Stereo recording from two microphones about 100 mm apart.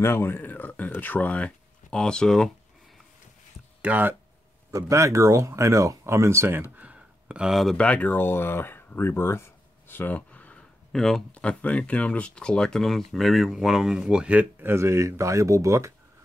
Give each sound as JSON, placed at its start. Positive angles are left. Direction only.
{"t": 0.0, "sound": "speech", "side_deg": 25}
{"t": 3.8, "sound": "speech", "side_deg": -20}
{"t": 4.7, "sound": "speech", "side_deg": -30}
{"t": 6.8, "sound": "a sound", "side_deg": -10}
{"t": 7.7, "sound": "speech", "side_deg": 10}
{"t": 9.8, "sound": "a sound", "side_deg": 20}
{"t": 11.3, "sound": "speech", "side_deg": 15}